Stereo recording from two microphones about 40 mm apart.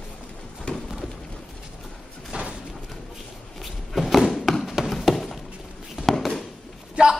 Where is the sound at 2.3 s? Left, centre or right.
Right.